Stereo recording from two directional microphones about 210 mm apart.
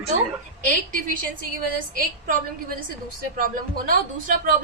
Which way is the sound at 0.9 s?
40° right (ahead or behind).